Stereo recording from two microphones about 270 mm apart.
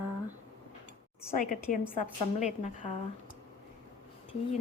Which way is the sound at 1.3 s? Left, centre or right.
Left.